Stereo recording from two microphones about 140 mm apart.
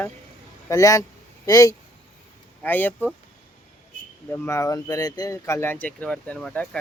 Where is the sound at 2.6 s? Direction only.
15° left (ahead or behind).